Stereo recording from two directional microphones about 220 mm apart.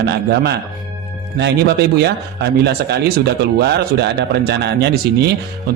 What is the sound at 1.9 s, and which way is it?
Speech, 50° right (ahead or behind).